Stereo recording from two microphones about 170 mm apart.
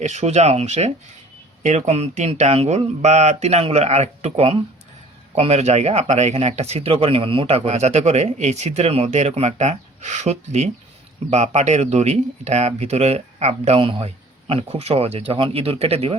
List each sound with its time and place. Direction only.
0.0 s speech: 45° right (ahead or behind)